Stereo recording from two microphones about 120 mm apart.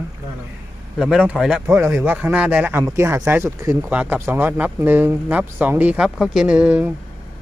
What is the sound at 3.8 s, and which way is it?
Speech, 10° right (ahead or behind).